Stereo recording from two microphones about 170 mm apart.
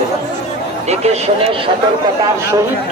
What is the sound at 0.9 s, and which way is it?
Speech, 40° right (ahead or behind).